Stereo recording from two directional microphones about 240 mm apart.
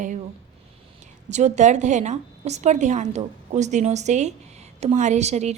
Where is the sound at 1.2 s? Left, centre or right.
Right.